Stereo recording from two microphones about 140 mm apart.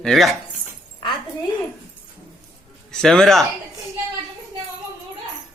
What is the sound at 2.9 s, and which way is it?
Speech, 5° left (ahead or behind).